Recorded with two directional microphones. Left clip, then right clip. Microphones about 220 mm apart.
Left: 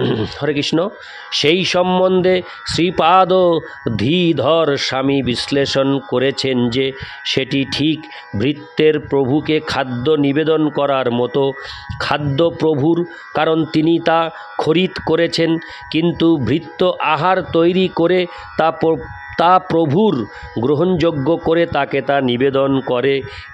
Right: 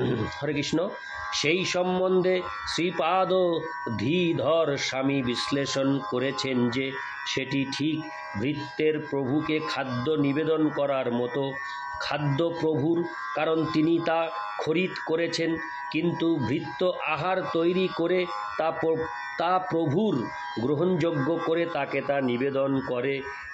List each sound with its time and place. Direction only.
0.0 s a man's voice: 45° left (ahead or behind)